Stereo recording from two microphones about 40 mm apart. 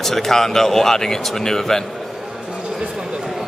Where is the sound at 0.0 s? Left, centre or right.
Centre.